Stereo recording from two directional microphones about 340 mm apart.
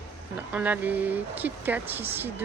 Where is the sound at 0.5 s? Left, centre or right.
Centre.